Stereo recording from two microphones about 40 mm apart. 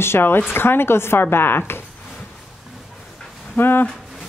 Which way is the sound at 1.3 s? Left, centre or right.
Left.